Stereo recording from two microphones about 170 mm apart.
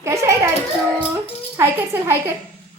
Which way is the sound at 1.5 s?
15° right (ahead or behind).